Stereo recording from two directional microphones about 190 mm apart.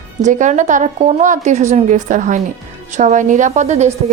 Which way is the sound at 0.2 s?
40° right (ahead or behind).